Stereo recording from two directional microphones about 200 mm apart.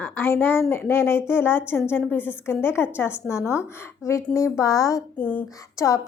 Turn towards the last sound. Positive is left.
turn(degrees=15)  # may be behind; listen again after turning